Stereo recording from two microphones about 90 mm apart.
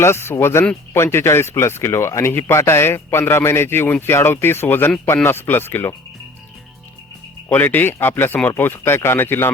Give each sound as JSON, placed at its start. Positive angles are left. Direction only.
{"t": 0.0, "sound": "speech", "side_deg": 30}
{"t": 7.5, "sound": "speech", "side_deg": 20}